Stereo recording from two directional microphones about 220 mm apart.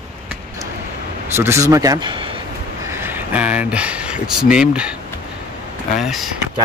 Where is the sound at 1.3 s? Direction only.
10° right (ahead or behind).